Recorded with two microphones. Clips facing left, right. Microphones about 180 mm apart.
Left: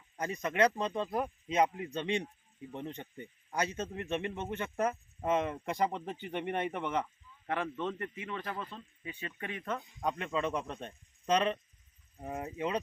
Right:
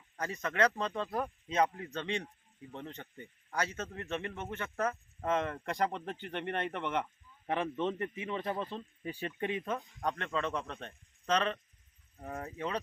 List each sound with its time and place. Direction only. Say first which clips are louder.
0.2 s speech: left 2 dB; 15° left (ahead or behind)
7.4 s speech: right 2 dB; 20° right (ahead or behind)
9.5 s speech: even; 20° right (ahead or behind)
9.7 s speech: left 1 dB; 5° left (ahead or behind)